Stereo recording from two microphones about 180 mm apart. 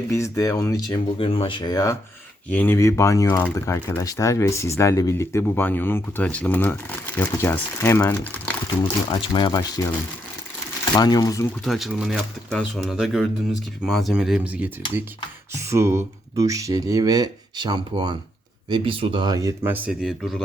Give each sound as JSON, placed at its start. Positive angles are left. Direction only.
{"t": 0.1, "sound": "speech", "side_deg": 15}
{"t": 1.2, "sound": "speech", "side_deg": 30}
{"t": 9.0, "sound": "speech", "side_deg": 25}
{"t": 10.9, "sound": "speech", "side_deg": 20}
{"t": 11.6, "sound": "speech", "side_deg": 0}